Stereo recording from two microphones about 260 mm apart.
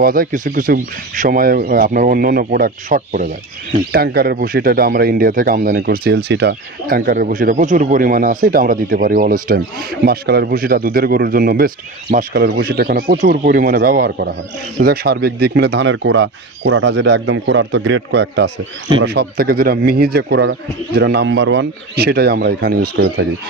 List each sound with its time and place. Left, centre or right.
0.0 s speech: right